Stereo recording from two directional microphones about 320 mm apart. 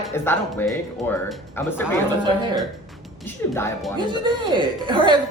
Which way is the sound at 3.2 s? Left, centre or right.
Centre.